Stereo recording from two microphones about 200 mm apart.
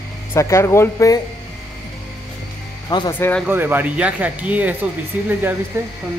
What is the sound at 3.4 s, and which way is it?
Speech, 10° right (ahead or behind).